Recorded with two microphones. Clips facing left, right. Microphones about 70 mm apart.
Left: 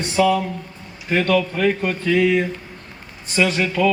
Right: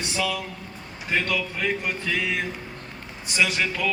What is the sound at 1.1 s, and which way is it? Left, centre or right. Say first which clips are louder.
Speech: left 8 dB; left.